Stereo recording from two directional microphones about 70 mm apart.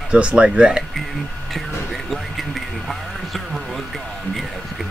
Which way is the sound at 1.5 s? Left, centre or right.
Centre.